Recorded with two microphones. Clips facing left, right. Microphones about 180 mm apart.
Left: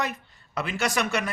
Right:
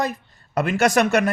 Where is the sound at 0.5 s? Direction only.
50° right (ahead or behind).